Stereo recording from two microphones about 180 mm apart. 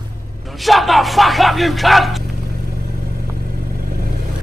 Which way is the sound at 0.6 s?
Centre (ahead or behind).